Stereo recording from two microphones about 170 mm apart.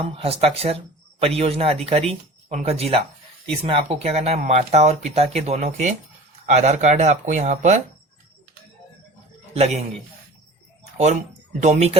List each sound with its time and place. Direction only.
0.0 s speech: 35° right (ahead or behind)
9.6 s speech: 40° right (ahead or behind)
10.9 s speech: 40° right (ahead or behind)